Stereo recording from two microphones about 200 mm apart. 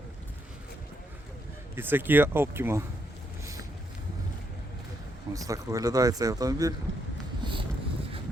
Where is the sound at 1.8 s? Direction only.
10° right (ahead or behind).